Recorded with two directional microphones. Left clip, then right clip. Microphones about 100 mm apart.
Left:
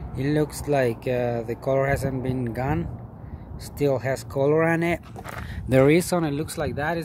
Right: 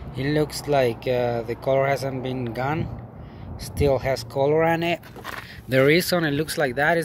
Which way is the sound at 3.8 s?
35° left (ahead or behind).